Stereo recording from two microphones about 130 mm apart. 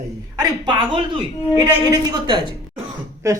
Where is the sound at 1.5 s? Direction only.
15° right (ahead or behind).